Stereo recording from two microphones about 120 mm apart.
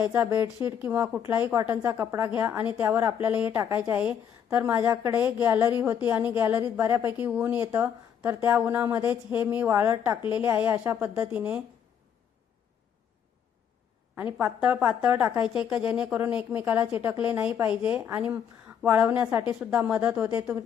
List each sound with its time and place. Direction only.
0.6 s a woman's voice: 20° right (ahead or behind)
3.5 s a woman's voice: 25° right (ahead or behind)
4.0 s a woman's voice: 10° right (ahead or behind)
14.2 s a woman's voice: 15° right (ahead or behind)